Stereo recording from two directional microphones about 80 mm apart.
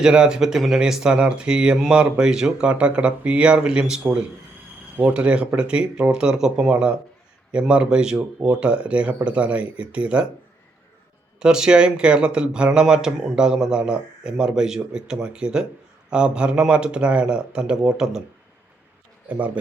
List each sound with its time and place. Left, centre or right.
0.0 s speech: centre
11.3 s speech: centre